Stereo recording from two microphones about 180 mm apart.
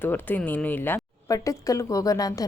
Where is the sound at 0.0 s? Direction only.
10° left (ahead or behind).